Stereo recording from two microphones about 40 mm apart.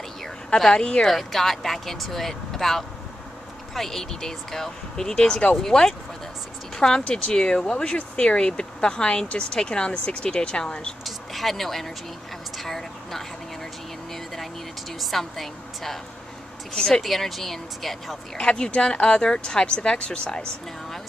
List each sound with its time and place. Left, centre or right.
0.6 s speech: centre
1.0 s speech: centre
11.1 s a sound: centre
12.5 s vehicle: centre
14.1 s a sound: centre
15.0 s a woman's voice: centre
18.4 s speech: left